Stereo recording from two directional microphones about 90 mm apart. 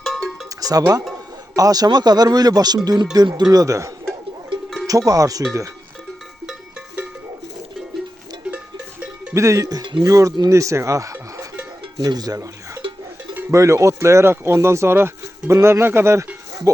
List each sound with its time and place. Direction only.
0.0 s cowbell: 5° left (ahead or behind)
0.6 s speech: 45° right (ahead or behind)
6.4 s cowbell: 10° right (ahead or behind)
8.4 s cowbell: 15° right (ahead or behind)
9.3 s speech: 35° right (ahead or behind)
11.8 s music: 50° right (ahead or behind)
12.8 s cowbell: 75° right (ahead or behind)
13.5 s speech: 35° right (ahead or behind)